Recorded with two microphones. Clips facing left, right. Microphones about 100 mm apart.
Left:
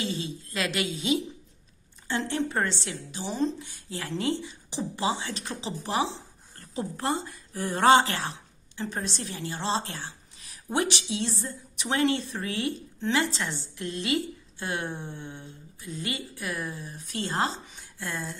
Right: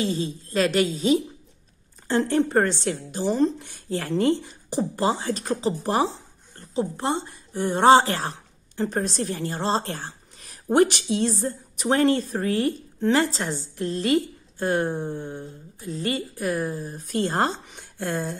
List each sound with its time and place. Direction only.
0.0 s a woman's voice: 40° right (ahead or behind)
6.5 s speech: 25° right (ahead or behind); by 18.4 s 55° right (ahead or behind)